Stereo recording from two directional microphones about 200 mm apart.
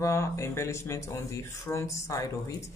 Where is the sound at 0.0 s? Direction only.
15° left (ahead or behind).